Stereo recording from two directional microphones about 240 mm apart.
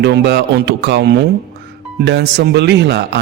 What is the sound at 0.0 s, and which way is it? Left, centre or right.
Speech, right.